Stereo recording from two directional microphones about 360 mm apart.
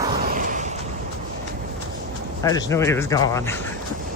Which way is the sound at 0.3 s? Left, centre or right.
Right.